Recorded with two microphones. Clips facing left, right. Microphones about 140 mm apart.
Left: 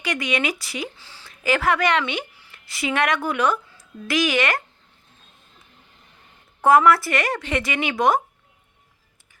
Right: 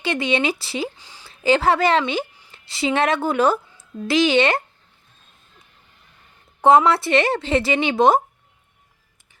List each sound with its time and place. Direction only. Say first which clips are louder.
0.0 s speech: right 4 dB; 30° right (ahead or behind)
0.9 s a sound: right 1 dB; 15° right (ahead or behind)
1.3 s a woman's voice: right 4 dB; 30° right (ahead or behind)
6.6 s speech: right 1 dB; 25° right (ahead or behind)